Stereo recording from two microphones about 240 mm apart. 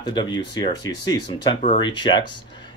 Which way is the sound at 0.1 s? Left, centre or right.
Centre.